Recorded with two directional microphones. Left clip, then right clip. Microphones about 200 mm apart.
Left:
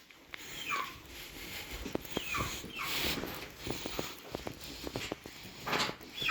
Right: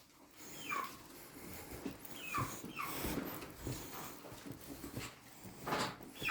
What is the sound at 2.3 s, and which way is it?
Dog, 15° right (ahead or behind).